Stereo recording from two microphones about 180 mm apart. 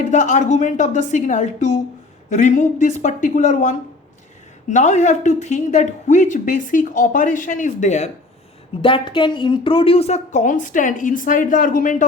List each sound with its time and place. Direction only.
0.1 s speech: 45° left (ahead or behind)
8.8 s speech: 30° left (ahead or behind); by 12.0 s 45° left (ahead or behind)